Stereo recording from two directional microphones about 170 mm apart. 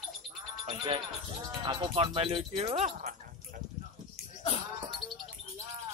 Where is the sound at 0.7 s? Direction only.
30° right (ahead or behind).